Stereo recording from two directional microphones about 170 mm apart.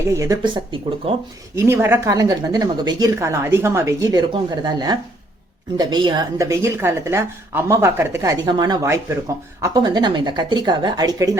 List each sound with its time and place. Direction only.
0.0 s a woman's voice: 15° right (ahead or behind)
0.4 s speech: 30° right (ahead or behind)
1.5 s a woman's voice: 15° right (ahead or behind)